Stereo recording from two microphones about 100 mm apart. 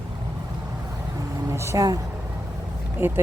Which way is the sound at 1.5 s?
30° right (ahead or behind).